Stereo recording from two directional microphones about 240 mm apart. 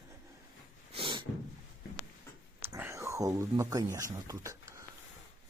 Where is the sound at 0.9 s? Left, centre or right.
Right.